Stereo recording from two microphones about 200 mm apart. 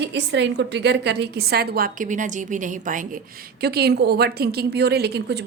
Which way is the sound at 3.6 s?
55° right (ahead or behind).